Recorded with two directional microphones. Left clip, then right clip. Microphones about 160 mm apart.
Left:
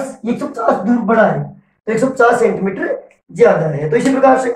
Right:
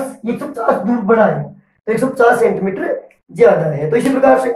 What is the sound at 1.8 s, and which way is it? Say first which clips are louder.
Speech: even; 15° right (ahead or behind).